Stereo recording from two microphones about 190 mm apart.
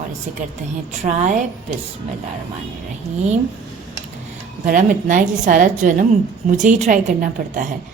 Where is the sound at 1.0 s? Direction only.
40° right (ahead or behind).